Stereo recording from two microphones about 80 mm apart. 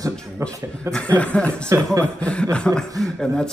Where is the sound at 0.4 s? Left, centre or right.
Right.